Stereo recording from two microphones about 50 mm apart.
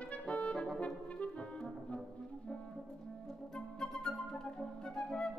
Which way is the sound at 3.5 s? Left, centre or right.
Centre.